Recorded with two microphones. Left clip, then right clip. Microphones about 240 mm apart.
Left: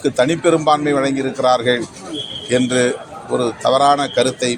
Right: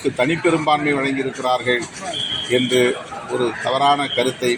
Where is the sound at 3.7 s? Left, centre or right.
Left.